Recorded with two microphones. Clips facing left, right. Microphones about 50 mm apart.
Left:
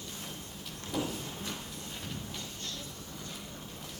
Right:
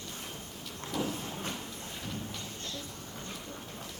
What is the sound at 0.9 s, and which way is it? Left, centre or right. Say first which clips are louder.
Vehicle: even; centre.